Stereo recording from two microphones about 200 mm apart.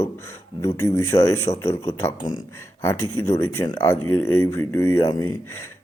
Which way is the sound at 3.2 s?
10° left (ahead or behind).